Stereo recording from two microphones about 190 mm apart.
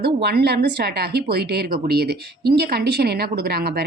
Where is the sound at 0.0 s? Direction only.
60° right (ahead or behind).